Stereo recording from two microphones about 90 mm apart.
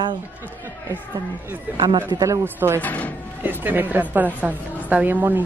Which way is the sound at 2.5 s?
25° right (ahead or behind).